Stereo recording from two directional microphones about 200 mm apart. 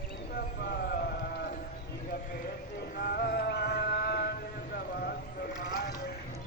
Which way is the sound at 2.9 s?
50° left (ahead or behind).